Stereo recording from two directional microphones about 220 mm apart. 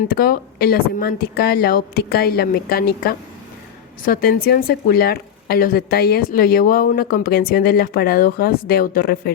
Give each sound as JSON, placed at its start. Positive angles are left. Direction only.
{"t": 0.1, "sound": "speech", "side_deg": 40}